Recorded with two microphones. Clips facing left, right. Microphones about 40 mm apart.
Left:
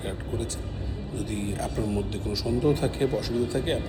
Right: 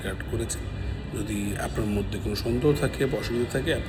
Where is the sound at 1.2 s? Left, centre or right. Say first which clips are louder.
Right 1 dB; right.